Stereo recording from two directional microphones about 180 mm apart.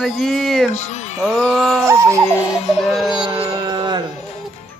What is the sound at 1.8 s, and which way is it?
Speech, 15° right (ahead or behind).